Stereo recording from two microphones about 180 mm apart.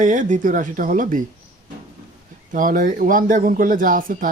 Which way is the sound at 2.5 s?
50° right (ahead or behind).